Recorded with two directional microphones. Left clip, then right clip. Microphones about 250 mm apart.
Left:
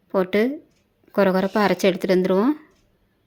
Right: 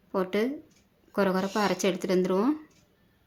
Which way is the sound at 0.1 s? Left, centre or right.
Left.